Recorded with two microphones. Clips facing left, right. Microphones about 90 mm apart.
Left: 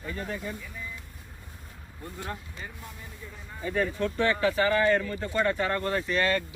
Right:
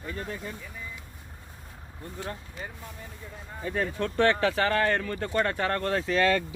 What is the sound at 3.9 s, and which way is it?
Speech, 55° right (ahead or behind).